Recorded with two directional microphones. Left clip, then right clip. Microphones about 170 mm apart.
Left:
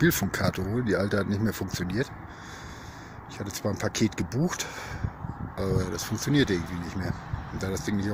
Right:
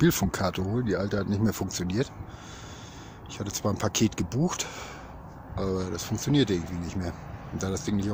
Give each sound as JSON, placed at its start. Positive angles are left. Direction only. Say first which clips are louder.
{"t": 0.0, "sound": "speech", "louder": "even", "side_deg": -15}
{"t": 0.7, "sound": "speech", "louder": "left 2 dB", "side_deg": 5}
{"t": 1.4, "sound": "speech", "louder": "right 1 dB", "side_deg": -20}
{"t": 3.3, "sound": "speech", "louder": "right 1 dB", "side_deg": -15}